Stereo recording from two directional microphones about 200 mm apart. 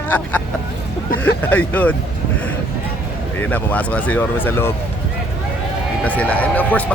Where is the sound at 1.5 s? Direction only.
10° left (ahead or behind).